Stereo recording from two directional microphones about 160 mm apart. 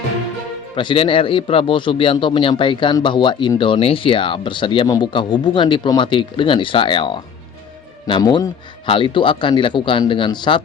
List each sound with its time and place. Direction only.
0.8 s a man's voice: 30° left (ahead or behind)